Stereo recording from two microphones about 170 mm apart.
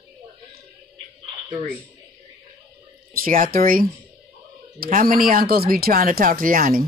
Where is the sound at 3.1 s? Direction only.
55° right (ahead or behind).